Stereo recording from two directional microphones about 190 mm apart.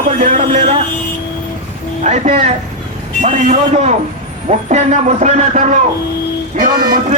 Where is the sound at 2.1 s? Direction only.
40° right (ahead or behind).